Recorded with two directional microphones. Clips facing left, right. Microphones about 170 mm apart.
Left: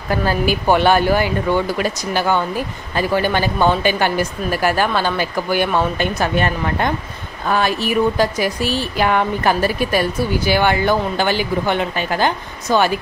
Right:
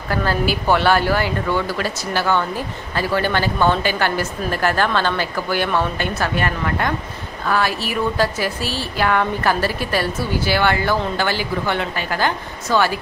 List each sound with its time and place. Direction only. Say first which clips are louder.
0.1 s speech: left 2 dB; 15° left (ahead or behind)